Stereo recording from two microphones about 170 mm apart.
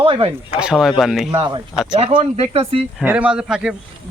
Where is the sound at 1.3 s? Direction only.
25° right (ahead or behind).